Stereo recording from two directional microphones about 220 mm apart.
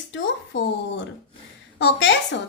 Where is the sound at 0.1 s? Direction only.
60° left (ahead or behind).